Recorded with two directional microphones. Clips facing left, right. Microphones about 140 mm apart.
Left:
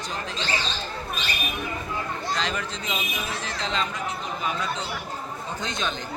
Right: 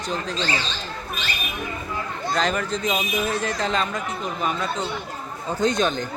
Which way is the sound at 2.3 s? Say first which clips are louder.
Right 9 dB; 50° right (ahead or behind).